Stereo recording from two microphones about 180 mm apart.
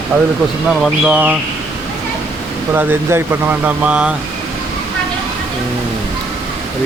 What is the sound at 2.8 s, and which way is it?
Speech, 10° right (ahead or behind).